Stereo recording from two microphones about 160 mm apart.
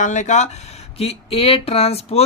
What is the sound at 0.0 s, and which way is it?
Speech, 50° left (ahead or behind).